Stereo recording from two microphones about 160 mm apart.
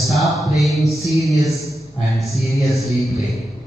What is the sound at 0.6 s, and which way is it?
Speech, centre (ahead or behind).